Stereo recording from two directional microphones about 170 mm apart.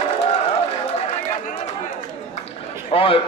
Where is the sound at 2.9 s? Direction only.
30° left (ahead or behind).